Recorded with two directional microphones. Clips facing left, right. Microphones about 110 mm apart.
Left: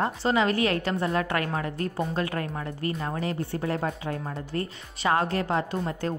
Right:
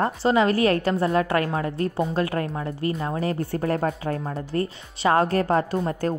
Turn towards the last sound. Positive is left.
turn(degrees=-40)  # may be behind; listen again after turning